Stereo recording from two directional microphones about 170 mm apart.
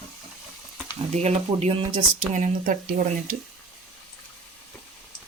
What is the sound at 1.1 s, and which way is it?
Speech, 40° right (ahead or behind).